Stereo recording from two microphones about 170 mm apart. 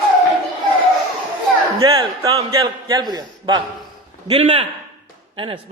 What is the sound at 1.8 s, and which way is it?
A man's voice, 30° right (ahead or behind).